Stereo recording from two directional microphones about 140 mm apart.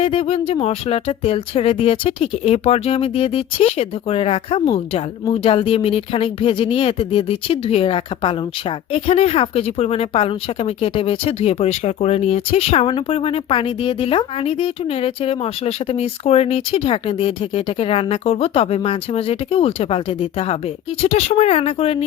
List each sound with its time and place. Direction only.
0.0 s speech: 40° left (ahead or behind)